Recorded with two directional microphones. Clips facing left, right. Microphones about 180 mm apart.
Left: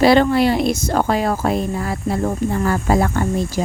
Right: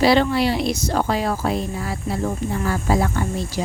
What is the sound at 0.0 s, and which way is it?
Speech, 50° left (ahead or behind).